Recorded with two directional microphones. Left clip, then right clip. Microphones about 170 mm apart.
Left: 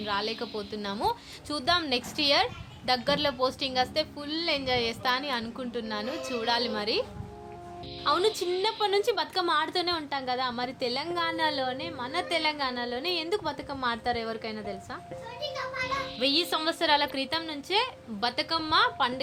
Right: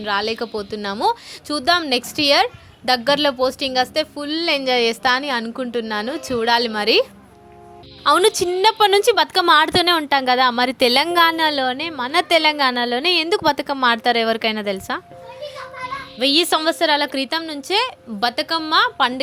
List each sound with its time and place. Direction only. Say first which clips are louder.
0.0 s a woman's voice: right 9 dB; 50° right (ahead or behind)
8.0 s a woman's voice: right 11 dB; 50° right (ahead or behind)
16.1 s a woman's voice: right 12 dB; 50° right (ahead or behind)